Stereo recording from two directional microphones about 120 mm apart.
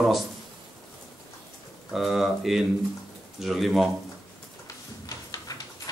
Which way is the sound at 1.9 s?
Centre (ahead or behind).